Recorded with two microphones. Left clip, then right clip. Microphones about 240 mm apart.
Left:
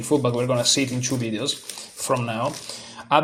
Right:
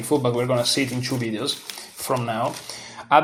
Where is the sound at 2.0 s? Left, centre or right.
Left.